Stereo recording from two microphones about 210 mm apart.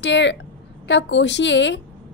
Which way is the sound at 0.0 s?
60° left (ahead or behind).